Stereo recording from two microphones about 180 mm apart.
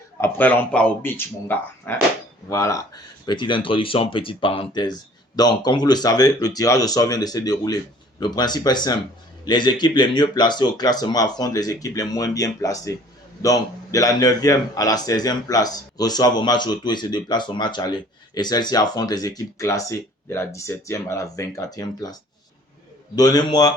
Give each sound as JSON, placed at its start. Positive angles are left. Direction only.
{"t": 0.2, "sound": "a man's voice", "side_deg": 10}